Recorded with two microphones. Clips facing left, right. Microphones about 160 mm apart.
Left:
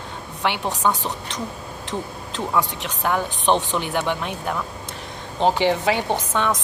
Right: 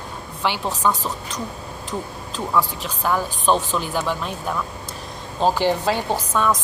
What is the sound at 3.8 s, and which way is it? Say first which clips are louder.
Speech: even; 65° left (ahead or behind).